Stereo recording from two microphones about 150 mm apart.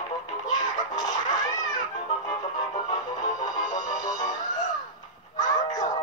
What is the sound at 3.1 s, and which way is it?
Music, 25° left (ahead or behind).